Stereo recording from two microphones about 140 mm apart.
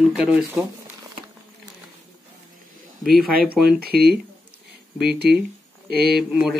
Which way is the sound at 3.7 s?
90° right.